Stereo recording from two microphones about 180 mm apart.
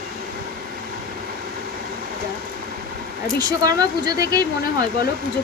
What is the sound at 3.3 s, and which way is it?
Speech, 20° right (ahead or behind).